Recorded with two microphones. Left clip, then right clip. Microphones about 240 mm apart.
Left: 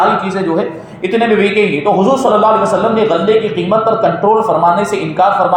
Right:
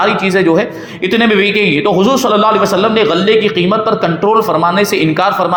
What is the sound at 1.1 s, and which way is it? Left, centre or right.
A man's voice, right.